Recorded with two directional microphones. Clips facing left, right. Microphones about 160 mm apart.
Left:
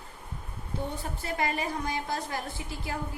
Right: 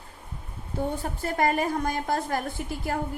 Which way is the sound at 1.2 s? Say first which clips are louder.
Right 6 dB; 45° right (ahead or behind).